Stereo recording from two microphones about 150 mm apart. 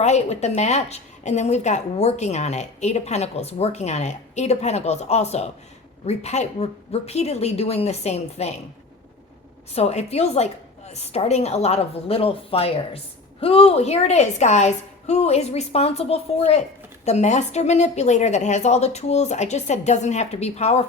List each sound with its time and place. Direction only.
0.0 s a woman's voice: 50° left (ahead or behind)
9.7 s a woman's voice: 45° left (ahead or behind)